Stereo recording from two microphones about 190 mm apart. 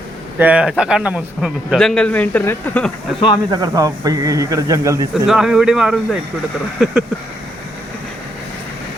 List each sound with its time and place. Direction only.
0.3 s speech: 5° right (ahead or behind); by 2.9 s 10° left (ahead or behind)
3.5 s speech: 20° right (ahead or behind)
5.1 s speech: 5° right (ahead or behind)